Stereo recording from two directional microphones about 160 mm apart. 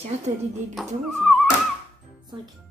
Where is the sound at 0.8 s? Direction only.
Centre (ahead or behind).